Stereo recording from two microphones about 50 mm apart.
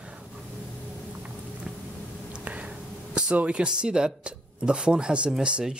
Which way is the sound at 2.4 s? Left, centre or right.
Right.